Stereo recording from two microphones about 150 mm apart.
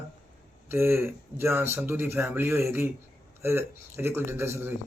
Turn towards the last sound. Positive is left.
turn(degrees=-15)  # may be behind; listen again after turning